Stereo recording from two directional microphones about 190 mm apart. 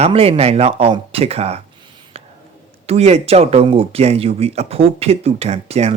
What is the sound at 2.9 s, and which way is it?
Speech, 35° right (ahead or behind).